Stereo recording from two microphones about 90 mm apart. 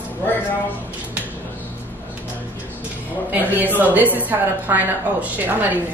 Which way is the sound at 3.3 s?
20° right (ahead or behind).